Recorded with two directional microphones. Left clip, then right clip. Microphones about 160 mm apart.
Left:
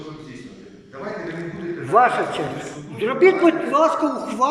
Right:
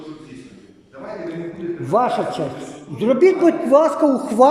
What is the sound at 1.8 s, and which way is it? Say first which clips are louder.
A man's voice: left 2 dB; 35° right (ahead or behind).